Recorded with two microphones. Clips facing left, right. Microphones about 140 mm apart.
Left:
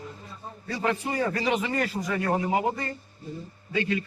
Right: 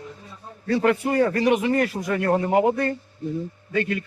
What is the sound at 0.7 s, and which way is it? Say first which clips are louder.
A man's voice: right 8 dB; 60° right (ahead or behind).